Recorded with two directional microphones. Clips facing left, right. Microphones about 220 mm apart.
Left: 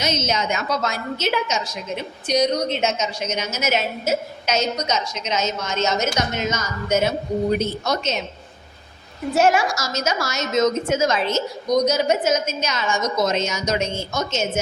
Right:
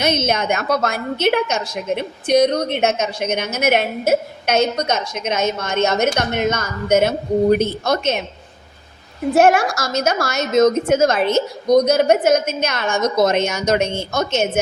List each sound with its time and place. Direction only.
0.0 s a woman's voice: 55° right (ahead or behind)
9.3 s a woman's voice: 55° right (ahead or behind)